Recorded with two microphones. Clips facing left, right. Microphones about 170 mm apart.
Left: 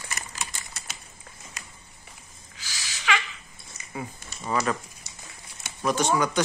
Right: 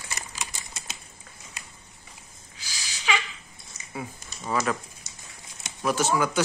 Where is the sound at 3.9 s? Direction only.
Centre (ahead or behind).